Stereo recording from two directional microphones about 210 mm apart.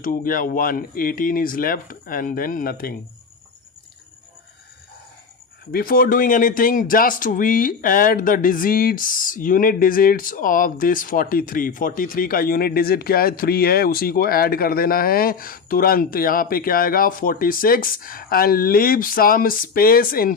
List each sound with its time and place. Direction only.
0.0 s speech: 40° left (ahead or behind)
5.7 s speech: 45° left (ahead or behind)